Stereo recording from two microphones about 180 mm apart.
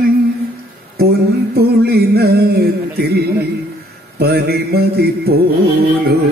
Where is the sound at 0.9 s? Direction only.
60° right (ahead or behind).